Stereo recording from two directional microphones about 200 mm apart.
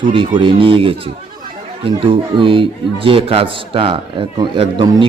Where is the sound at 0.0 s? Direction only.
25° right (ahead or behind).